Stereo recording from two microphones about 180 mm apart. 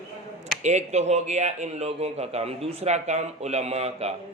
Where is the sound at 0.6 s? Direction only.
40° right (ahead or behind).